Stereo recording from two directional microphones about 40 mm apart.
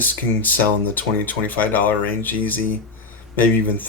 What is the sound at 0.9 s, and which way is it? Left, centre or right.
Speech, left.